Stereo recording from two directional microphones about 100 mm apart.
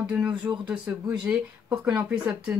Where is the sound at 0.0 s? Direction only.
10° right (ahead or behind).